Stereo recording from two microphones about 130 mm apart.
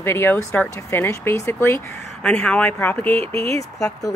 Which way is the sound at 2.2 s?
5° left (ahead or behind).